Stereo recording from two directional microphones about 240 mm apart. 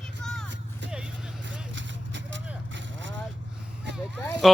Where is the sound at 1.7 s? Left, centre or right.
Right.